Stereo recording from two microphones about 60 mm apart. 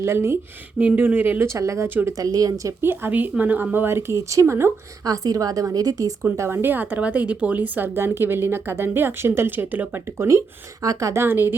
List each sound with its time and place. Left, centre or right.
0.0 s speech: right
0.9 s speech: right
1.5 s speech: right
2.1 s speech: right
2.8 s speech: right
3.1 s speech: right
5.0 s a woman's voice: right
6.3 s speech: right
6.6 s speech: right
7.9 s speech: right
9.5 s speech: right
10.2 s speech: right
11.1 s speech: right